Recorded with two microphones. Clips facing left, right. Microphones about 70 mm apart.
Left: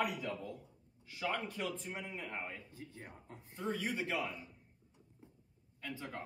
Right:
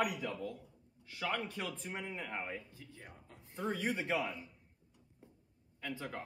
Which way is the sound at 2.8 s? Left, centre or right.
Left.